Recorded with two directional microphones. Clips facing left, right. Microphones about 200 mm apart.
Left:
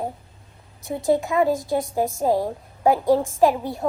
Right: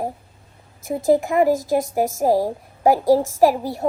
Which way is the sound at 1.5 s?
90° right.